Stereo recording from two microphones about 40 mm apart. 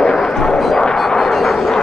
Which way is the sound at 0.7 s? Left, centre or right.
Centre.